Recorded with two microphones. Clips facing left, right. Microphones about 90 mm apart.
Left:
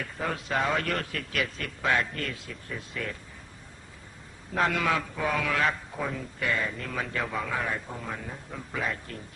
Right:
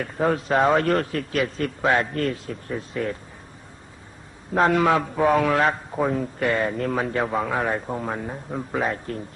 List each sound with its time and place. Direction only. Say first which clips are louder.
0.0 s a man's voice: right 10 dB; 40° right (ahead or behind)
4.5 s a man's voice: right 8 dB; 35° right (ahead or behind)